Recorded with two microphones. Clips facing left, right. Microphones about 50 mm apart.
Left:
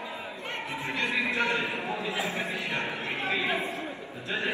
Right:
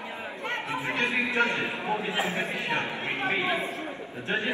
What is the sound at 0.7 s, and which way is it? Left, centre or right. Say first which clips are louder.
A man's voice: right 2 dB; right.